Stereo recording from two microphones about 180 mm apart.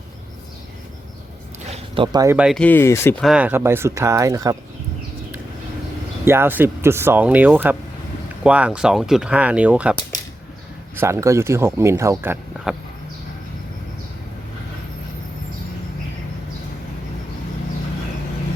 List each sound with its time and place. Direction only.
1.7 s a sound: 30° right (ahead or behind)
2.2 s speech: 5° right (ahead or behind)
2.6 s speech: 10° left (ahead or behind)
3.2 s speech: 5° right (ahead or behind)
6.2 s speech: 15° right (ahead or behind)
10.9 s speech: 15° right (ahead or behind)